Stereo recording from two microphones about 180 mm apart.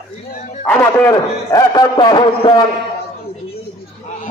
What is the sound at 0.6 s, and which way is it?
Speech, 10° left (ahead or behind).